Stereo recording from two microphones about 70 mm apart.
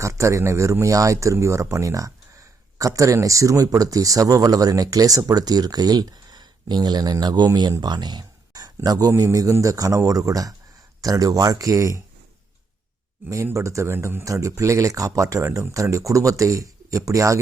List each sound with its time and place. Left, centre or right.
0.0 s speech: right
13.3 s speech: right